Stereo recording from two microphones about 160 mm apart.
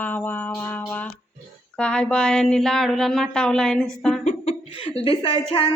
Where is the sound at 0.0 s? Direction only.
10° left (ahead or behind).